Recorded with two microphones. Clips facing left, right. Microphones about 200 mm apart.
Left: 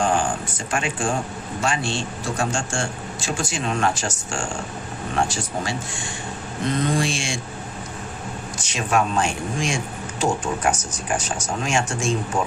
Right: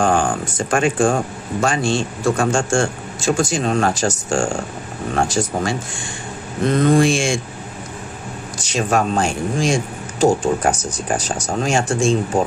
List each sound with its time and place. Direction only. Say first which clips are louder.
0.0 s a man's voice: right 4 dB; 50° right (ahead or behind)
7.0 s a man's voice: right 9 dB; 50° right (ahead or behind)
8.6 s speech: right 4 dB; 40° right (ahead or behind)